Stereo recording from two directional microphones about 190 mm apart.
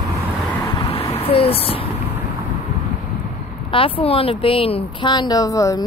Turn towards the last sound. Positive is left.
turn(degrees=15)  # may be behind; listen again after turning